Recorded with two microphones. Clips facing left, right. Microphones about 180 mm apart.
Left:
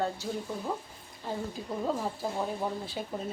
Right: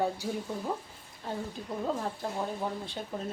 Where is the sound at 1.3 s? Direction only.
Centre (ahead or behind).